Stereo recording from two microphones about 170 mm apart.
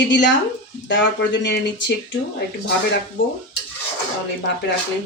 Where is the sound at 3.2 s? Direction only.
90° left.